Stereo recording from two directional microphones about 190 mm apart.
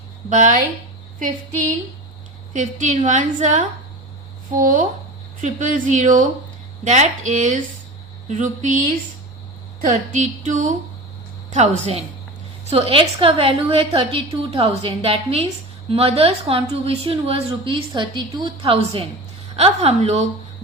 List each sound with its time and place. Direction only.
0.3 s speech: 40° right (ahead or behind)
2.5 s a woman's voice: 40° right (ahead or behind)
9.8 s a woman's voice: 40° right (ahead or behind)